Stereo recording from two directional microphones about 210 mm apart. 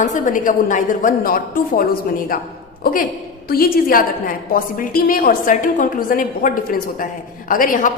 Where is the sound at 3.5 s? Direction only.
45° left (ahead or behind).